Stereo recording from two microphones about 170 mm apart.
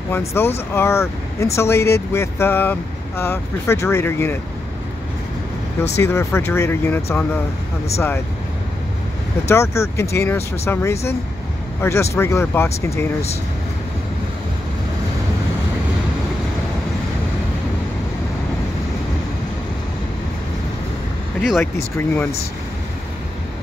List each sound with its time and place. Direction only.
0.3 s speech: 15° left (ahead or behind)
5.9 s speech: 15° left (ahead or behind)
9.5 s speech: 15° left (ahead or behind)
21.4 s speech: centre (ahead or behind)
21.9 s speech: 10° left (ahead or behind)